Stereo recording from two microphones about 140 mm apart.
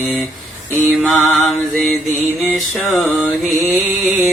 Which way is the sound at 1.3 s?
Centre (ahead or behind).